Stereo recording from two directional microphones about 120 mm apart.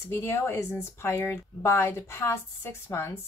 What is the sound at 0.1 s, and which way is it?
Speech, 20° left (ahead or behind).